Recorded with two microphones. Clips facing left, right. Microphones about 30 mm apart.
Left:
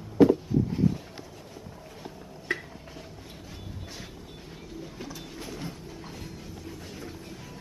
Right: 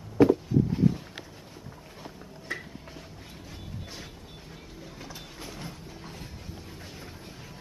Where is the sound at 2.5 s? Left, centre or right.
Left.